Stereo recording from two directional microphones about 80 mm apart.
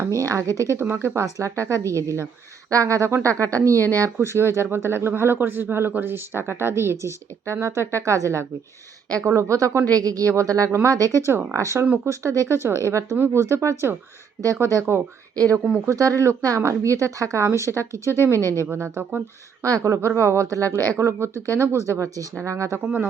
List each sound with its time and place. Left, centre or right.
0.2 s speech: right
0.8 s speech: right
13.1 s speech: right
15.4 s speech: right
18.3 s speech: left
18.7 s speech: right
19.7 s speech: right